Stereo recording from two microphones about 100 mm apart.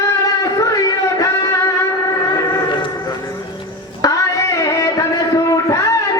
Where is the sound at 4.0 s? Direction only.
35° left (ahead or behind).